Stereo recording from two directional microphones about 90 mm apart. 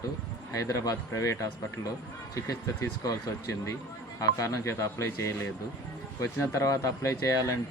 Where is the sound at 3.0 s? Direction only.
40° left (ahead or behind).